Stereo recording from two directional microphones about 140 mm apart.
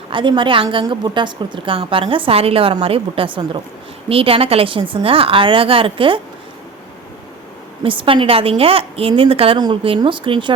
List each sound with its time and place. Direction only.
0.1 s a woman's voice: 35° right (ahead or behind)
7.9 s a woman's voice: 40° right (ahead or behind)